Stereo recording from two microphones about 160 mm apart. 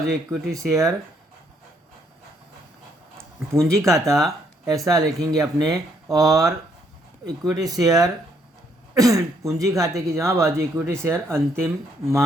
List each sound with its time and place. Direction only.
0.0 s speech: 20° right (ahead or behind)
3.2 s a sound: 15° right (ahead or behind)
3.8 s speech: 20° right (ahead or behind)